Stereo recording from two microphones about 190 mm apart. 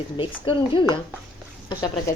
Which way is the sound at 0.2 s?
25° left (ahead or behind).